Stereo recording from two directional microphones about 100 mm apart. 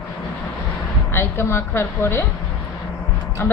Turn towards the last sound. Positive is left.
turn(degrees=25)  # may be behind; listen again after turning